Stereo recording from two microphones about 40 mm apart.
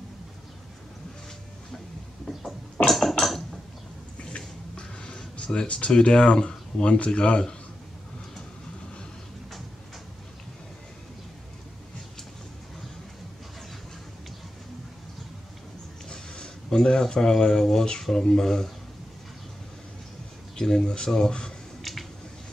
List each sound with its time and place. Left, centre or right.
2.9 s a sound: centre
4.7 s music: left
5.9 s speech: centre
16.1 s speech: centre
20.5 s speech: centre